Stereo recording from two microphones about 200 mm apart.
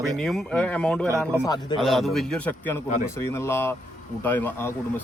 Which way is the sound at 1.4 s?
20° left (ahead or behind).